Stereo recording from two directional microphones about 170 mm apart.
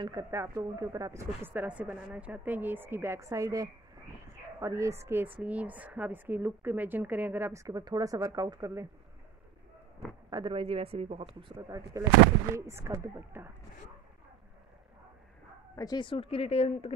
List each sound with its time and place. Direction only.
0.0 s a woman's voice: 20° right (ahead or behind)
10.3 s speech: 30° right (ahead or behind)
11.5 s a woman's voice: 20° right (ahead or behind)
15.7 s speech: 20° left (ahead or behind)